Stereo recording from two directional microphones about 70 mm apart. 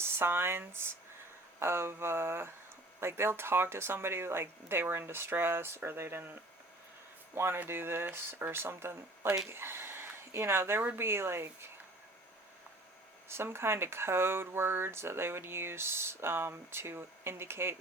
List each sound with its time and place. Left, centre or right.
0.0 s speech: right
9.2 s speech: centre
9.5 s speech: right
13.2 s speech: right